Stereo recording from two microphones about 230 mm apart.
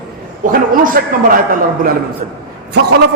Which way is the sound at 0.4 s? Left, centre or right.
Right.